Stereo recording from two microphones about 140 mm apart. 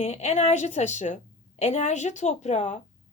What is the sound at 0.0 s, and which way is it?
A woman's voice, 50° left (ahead or behind).